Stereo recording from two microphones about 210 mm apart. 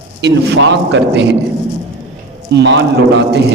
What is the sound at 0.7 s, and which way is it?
Speech, 55° right (ahead or behind).